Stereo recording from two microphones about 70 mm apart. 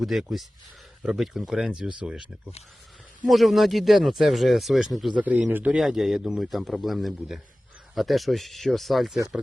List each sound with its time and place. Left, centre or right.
0.0 s speech: centre
3.2 s speech: centre
5.1 s speech: centre
5.7 s speech: centre